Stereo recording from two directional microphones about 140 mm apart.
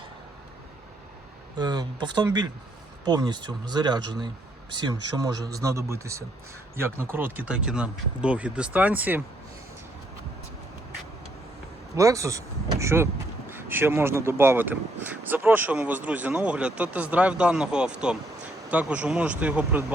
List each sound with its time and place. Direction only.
1.5 s a man's voice: 30° right (ahead or behind); by 9.2 s 10° right (ahead or behind)
11.9 s a man's voice: 25° right (ahead or behind)